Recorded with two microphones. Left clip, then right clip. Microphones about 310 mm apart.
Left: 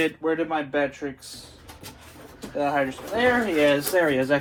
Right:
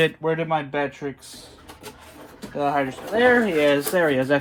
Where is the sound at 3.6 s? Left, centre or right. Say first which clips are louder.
Right 1 dB; right.